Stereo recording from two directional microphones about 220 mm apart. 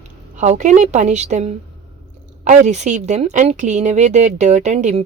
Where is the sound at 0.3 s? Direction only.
30° right (ahead or behind).